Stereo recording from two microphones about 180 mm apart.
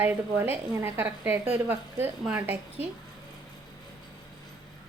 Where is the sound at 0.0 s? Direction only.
10° right (ahead or behind).